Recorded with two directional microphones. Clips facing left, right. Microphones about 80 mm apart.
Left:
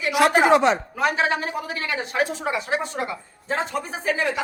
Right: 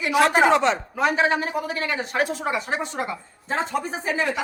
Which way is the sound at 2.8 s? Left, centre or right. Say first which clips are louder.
Even; right.